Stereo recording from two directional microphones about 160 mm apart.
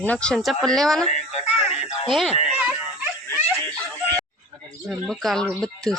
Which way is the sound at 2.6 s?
10° right (ahead or behind).